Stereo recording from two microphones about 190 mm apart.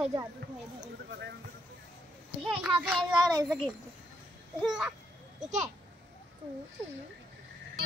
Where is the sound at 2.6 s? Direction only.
5° right (ahead or behind).